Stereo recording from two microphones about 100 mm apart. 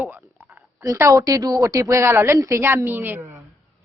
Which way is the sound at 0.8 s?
35° right (ahead or behind).